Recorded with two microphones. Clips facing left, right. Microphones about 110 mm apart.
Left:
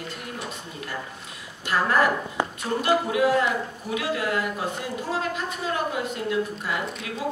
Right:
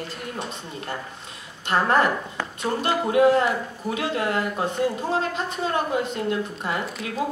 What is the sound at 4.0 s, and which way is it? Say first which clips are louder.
Speech: right 1 dB; 30° right (ahead or behind).